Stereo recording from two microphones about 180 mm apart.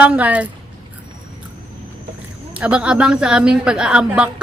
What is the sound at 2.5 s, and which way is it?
A woman's voice, 5° right (ahead or behind).